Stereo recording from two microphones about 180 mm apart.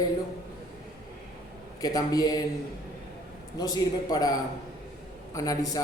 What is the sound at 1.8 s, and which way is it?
Speech, 20° left (ahead or behind).